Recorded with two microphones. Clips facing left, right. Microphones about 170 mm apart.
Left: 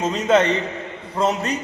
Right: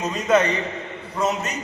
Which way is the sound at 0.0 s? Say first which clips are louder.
Left 2 dB; 30° left (ahead or behind).